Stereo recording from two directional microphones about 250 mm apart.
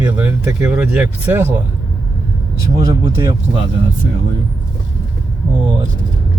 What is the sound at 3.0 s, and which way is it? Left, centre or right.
Speech, centre.